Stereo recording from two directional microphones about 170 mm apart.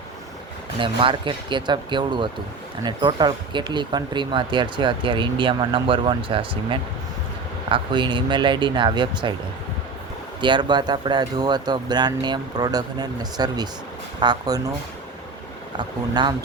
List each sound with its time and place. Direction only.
0.8 s speech: 30° right (ahead or behind)
10.4 s speech: 25° right (ahead or behind)
15.8 s speech: 25° right (ahead or behind)